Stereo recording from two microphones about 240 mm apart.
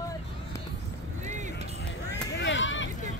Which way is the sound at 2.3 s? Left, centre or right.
Left.